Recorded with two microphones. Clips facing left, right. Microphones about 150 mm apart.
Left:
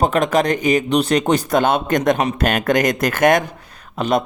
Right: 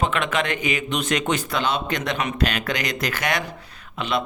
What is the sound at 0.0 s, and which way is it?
Speech, 40° left (ahead or behind).